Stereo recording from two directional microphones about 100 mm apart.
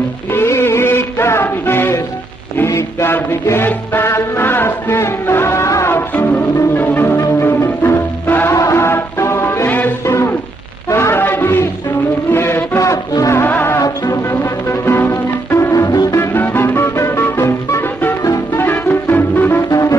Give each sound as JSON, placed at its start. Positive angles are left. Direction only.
{"t": 0.3, "sound": "music", "side_deg": 25}
{"t": 10.9, "sound": "a sound", "side_deg": 25}
{"t": 12.3, "sound": "music", "side_deg": 25}
{"t": 13.4, "sound": "music", "side_deg": 20}
{"t": 13.7, "sound": "music", "side_deg": 35}
{"t": 16.2, "sound": "music", "side_deg": 20}
{"t": 18.6, "sound": "music", "side_deg": 20}
{"t": 19.7, "sound": "music", "side_deg": 30}